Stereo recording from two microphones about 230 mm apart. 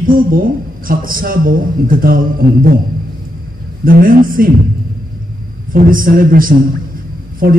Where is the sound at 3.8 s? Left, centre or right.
Right.